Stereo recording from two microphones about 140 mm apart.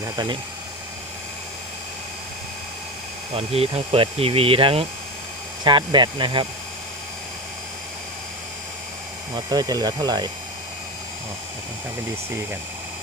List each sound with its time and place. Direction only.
3.3 s speech: 45° right (ahead or behind)
9.3 s speech: 30° right (ahead or behind)